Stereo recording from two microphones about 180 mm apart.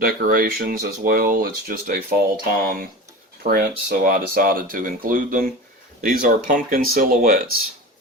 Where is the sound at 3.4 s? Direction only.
50° right (ahead or behind).